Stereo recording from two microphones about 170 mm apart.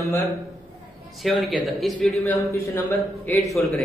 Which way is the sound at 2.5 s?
15° left (ahead or behind).